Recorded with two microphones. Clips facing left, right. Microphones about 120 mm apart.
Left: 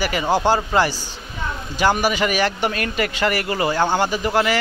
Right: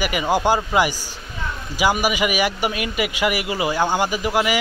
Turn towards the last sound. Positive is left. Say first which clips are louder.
# left 1 dB
turn(degrees=-10)  # may be behind; listen again after turning